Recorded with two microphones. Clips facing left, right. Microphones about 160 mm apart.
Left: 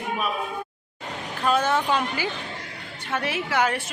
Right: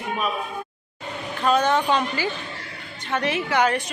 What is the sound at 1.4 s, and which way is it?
A woman's voice, 5° left (ahead or behind).